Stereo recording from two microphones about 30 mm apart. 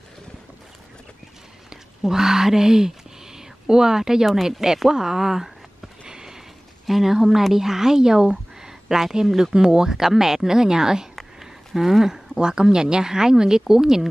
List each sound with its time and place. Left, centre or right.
2.0 s speech: centre
6.0 s sniff: right
6.9 s speech: centre
8.6 s a sound: centre
9.4 s speech: centre